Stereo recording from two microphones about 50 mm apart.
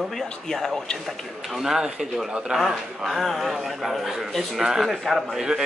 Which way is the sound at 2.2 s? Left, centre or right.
Centre.